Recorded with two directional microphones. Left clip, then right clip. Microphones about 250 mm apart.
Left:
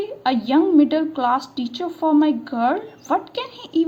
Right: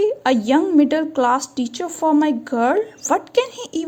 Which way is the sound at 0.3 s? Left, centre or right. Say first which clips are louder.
Left 3 dB; right.